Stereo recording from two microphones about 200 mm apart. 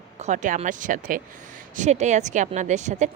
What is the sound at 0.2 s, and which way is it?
A woman's voice, 40° right (ahead or behind).